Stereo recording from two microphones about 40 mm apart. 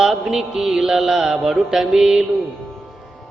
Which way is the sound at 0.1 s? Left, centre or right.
Centre.